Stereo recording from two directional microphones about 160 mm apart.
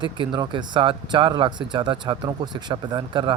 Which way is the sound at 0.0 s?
30° right (ahead or behind).